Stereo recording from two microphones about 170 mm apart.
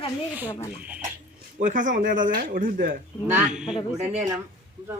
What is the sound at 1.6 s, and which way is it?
Speech, 50° right (ahead or behind).